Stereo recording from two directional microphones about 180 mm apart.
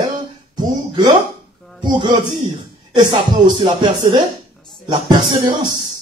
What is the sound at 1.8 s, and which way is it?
Speech, 25° right (ahead or behind).